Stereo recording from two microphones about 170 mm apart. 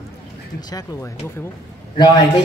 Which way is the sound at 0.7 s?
20° left (ahead or behind).